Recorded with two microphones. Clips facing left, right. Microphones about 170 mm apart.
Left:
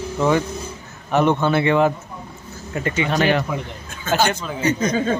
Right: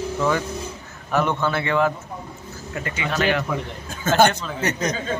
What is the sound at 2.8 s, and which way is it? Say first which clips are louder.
Speech: left 4 dB; 30° left (ahead or behind).